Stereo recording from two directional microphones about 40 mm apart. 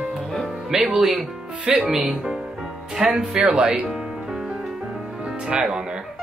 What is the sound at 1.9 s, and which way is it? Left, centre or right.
Speech, centre.